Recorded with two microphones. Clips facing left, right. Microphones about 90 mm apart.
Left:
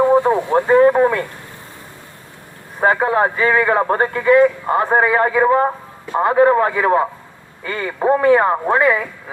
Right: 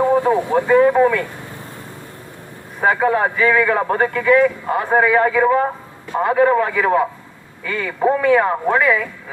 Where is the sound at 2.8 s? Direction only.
35° left (ahead or behind).